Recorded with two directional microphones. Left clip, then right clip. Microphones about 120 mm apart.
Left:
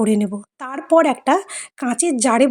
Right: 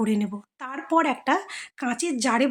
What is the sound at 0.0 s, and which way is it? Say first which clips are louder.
A woman's voice: left 8 dB; 35° left (ahead or behind).